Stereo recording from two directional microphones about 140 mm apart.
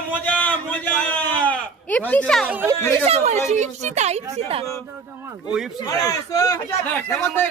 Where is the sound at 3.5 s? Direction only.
55° right (ahead or behind).